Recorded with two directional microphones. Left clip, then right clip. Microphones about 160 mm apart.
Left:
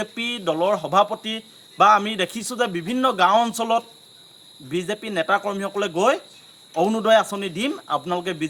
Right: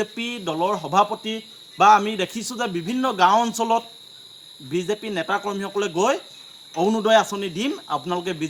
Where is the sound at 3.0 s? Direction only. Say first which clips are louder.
Even; 45° left (ahead or behind).